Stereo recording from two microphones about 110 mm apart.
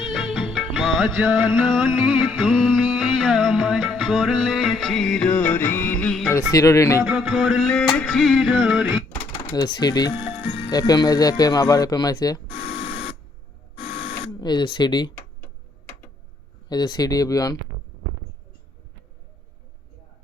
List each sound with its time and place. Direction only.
0.0 s music of bollywood: 5° right (ahead or behind)
1.2 s music: 10° right (ahead or behind); by 6.1 s 20° left (ahead or behind)
6.5 s speech: 30° left (ahead or behind)
7.0 s music: 5° right (ahead or behind)
9.5 s speech: 40° left (ahead or behind)
10.7 s speech: 35° left (ahead or behind)
12.5 s a sound: 60° left (ahead or behind)
13.7 s printer: 60° left (ahead or behind)
14.2 s speech: 40° left (ahead or behind)
16.6 s speech: 40° left (ahead or behind)